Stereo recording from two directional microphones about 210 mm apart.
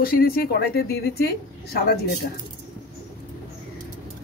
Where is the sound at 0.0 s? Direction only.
45° left (ahead or behind).